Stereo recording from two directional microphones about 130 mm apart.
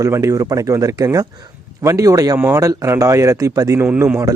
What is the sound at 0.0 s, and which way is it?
Speech, 25° right (ahead or behind).